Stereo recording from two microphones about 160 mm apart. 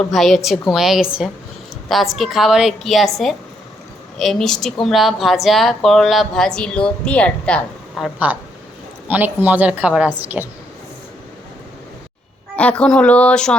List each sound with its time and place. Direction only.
0.0 s a woman's voice: centre (ahead or behind)
12.5 s speech: 10° left (ahead or behind)